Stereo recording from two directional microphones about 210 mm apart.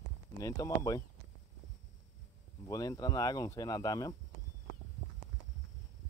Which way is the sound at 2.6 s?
15° left (ahead or behind).